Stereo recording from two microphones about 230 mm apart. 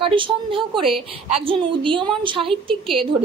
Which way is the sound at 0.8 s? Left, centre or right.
Centre.